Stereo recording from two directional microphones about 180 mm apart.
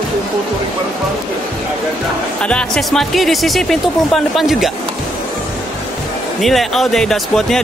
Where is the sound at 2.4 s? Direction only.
5° left (ahead or behind).